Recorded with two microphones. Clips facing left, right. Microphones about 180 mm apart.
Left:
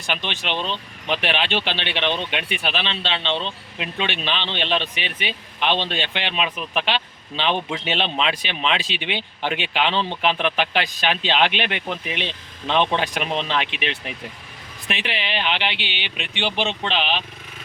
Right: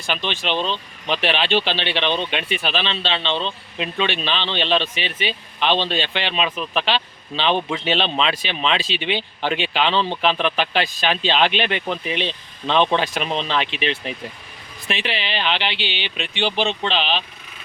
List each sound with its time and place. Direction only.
0.0 s speech: 15° left (ahead or behind)